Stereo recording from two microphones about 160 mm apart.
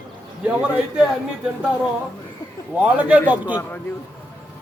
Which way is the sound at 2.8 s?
10° right (ahead or behind).